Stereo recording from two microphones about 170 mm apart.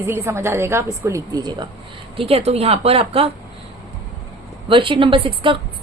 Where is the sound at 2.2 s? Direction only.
35° right (ahead or behind).